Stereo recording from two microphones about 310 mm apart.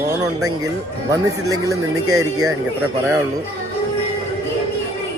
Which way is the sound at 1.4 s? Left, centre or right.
Centre.